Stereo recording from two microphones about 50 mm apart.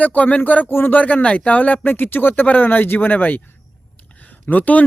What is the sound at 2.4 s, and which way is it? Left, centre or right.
Speech, left.